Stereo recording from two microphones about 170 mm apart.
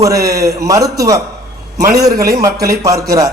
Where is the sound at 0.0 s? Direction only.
20° right (ahead or behind).